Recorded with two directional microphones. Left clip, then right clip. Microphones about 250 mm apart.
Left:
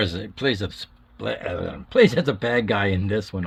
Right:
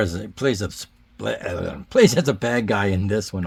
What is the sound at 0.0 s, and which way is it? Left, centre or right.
Speech, right.